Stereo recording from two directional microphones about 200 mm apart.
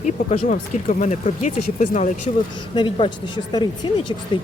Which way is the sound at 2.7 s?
25° left (ahead or behind).